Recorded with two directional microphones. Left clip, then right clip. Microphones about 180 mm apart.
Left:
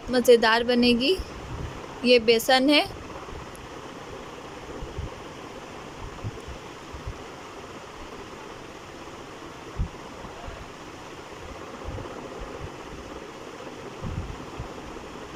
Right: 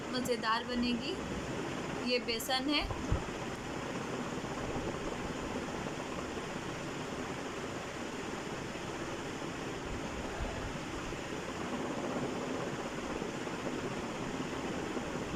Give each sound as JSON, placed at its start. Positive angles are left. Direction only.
{"t": 0.1, "sound": "speech", "side_deg": 55}